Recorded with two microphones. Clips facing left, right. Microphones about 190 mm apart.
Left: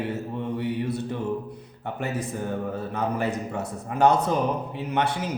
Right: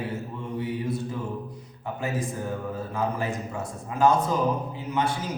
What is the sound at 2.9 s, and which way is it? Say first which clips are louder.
A man's voice: left 2 dB; 70° left (ahead or behind).